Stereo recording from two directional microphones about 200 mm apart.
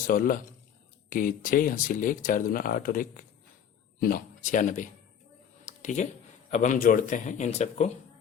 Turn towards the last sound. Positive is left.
turn(degrees=35)  # may be behind; listen again after turning